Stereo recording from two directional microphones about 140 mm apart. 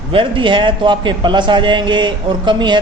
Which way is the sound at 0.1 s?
35° right (ahead or behind).